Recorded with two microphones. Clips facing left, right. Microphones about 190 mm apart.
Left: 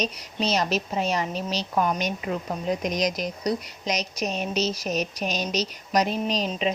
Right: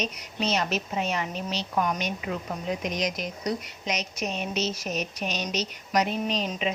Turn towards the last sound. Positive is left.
turn(degrees=35)  # may be behind; listen again after turning